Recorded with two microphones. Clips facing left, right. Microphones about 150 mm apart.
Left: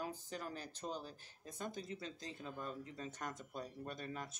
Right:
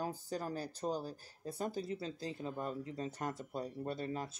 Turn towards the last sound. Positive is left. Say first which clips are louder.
# right 7 dB
turn(degrees=-30)  # may be behind; listen again after turning